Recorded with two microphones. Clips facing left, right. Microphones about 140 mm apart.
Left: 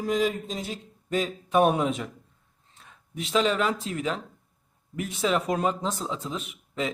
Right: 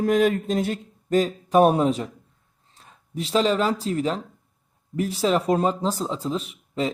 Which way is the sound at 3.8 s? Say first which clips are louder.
Right 5 dB; 35° right (ahead or behind).